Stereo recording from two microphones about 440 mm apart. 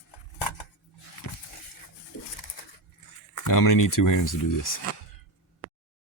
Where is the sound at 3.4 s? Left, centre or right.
Left.